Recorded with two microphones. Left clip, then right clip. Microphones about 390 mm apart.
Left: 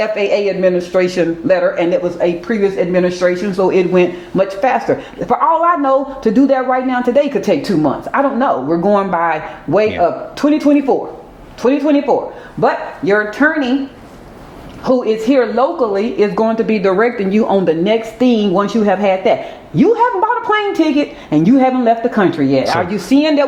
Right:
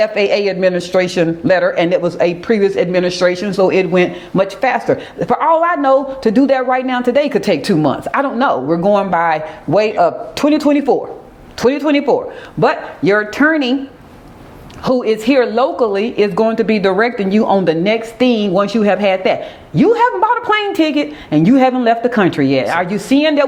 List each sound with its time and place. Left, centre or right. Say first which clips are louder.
0.0 s speech: right 1 dB; right
3.6 s speech: even; right
7.4 s speech: even; right
11.6 s a man's voice: even; right
13.1 s a woman's voice: left 1 dB; right
14.8 s speech: even; right; by 21.5 s centre
21.5 s speech: even; right